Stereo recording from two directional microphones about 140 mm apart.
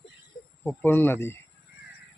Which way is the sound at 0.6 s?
15° left (ahead or behind).